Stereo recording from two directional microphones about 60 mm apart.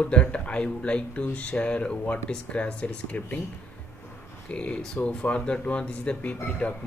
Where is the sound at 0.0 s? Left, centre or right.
Left.